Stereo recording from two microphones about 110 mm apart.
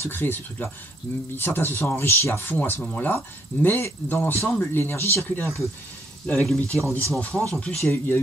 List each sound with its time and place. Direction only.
0.0 s speech: 20° left (ahead or behind)
6.2 s speech: 5° left (ahead or behind)
6.8 s speech: 25° right (ahead or behind)
7.2 s speech: 5° left (ahead or behind)
7.8 s speech: 20° left (ahead or behind)